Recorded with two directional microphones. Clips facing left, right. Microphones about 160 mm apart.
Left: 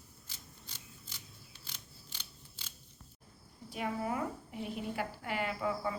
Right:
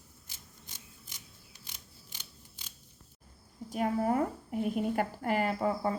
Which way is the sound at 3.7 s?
45° right (ahead or behind).